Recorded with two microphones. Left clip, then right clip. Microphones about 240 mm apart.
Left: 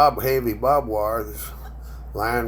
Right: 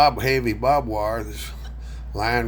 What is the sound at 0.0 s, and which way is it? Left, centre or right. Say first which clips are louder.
Speech: even; right.